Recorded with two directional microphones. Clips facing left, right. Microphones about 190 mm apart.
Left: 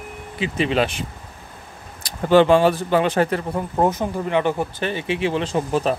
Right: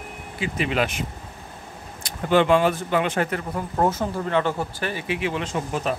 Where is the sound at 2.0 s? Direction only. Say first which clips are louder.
Left 5 dB; 35° left (ahead or behind).